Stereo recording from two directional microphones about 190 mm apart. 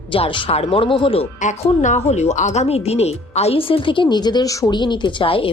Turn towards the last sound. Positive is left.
turn(degrees=30)  # may be behind; listen again after turning